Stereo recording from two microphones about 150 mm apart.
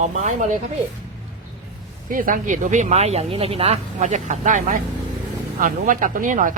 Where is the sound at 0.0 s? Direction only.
50° right (ahead or behind).